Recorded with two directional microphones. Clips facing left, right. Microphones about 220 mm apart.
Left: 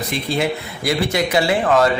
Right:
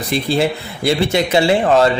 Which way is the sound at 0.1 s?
30° right (ahead or behind).